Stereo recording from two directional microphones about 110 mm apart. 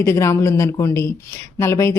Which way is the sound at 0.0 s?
25° left (ahead or behind).